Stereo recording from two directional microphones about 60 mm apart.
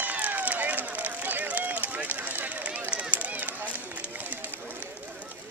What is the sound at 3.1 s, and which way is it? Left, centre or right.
Run, right.